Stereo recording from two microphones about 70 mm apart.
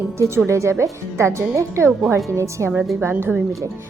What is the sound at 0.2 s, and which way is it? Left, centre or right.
A woman's voice, right.